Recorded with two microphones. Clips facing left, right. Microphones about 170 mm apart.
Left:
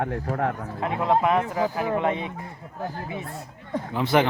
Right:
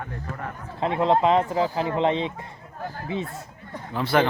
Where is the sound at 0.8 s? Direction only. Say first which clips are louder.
Right 2 dB; 25° right (ahead or behind).